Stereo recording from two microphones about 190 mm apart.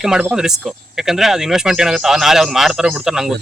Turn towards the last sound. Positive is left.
turn(degrees=0)  # may be behind; listen again after turning